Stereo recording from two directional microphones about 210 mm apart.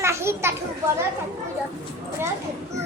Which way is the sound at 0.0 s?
10° right (ahead or behind).